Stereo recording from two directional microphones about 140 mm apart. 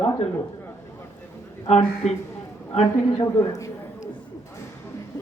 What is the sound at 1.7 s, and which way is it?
A man's voice, 50° left (ahead or behind).